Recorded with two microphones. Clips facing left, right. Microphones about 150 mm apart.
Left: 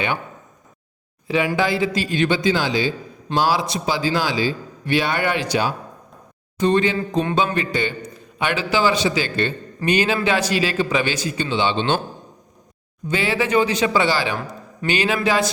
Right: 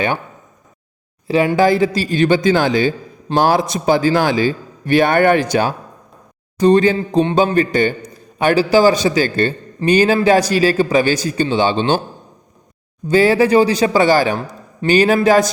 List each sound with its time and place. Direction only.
1.5 s a man's voice: 45° right (ahead or behind)
6.6 s a man's voice: 35° right (ahead or behind)
13.1 s a man's voice: 40° right (ahead or behind)